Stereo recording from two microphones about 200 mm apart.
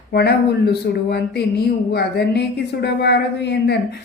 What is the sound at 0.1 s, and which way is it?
Speech, 55° left (ahead or behind).